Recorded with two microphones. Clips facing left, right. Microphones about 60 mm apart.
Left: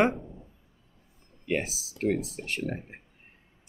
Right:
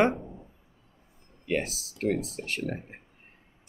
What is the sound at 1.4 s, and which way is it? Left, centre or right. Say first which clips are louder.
Speech: even; centre.